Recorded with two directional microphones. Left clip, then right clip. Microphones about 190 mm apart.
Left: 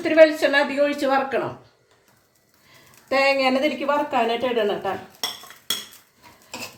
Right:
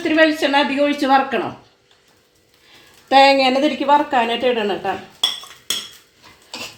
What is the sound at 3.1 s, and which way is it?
Speech, 45° right (ahead or behind).